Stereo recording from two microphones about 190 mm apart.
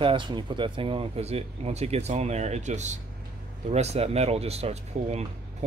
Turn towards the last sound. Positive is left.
turn(degrees=-35)  # may be behind; listen again after turning